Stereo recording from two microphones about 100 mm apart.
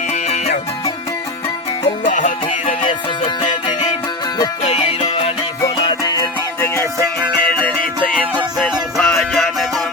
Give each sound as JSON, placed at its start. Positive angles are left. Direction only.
{"t": 4.7, "sound": "music", "side_deg": 90}
{"t": 8.5, "sound": "music", "side_deg": 0}